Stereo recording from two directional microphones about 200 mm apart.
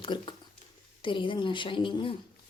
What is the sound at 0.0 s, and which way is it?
A woman's voice, 25° left (ahead or behind).